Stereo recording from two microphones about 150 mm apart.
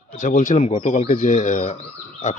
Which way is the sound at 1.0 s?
55° left (ahead or behind).